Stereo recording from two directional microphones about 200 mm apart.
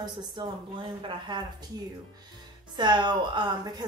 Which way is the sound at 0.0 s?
20° right (ahead or behind).